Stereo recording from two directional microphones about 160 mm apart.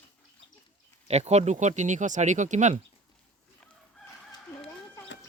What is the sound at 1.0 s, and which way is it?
Speech, 45° right (ahead or behind).